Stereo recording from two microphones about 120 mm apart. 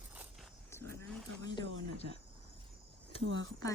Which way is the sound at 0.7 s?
20° left (ahead or behind).